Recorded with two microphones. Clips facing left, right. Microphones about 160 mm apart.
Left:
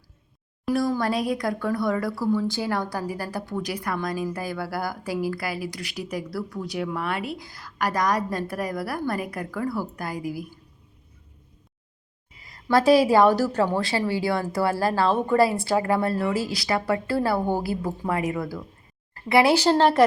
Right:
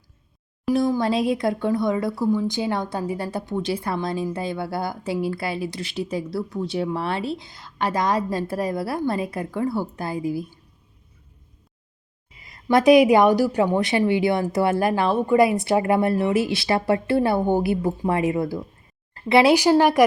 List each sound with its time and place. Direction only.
0.7 s speech: 20° right (ahead or behind)
12.4 s speech: 20° right (ahead or behind)